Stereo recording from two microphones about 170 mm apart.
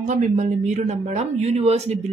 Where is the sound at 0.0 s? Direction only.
45° right (ahead or behind).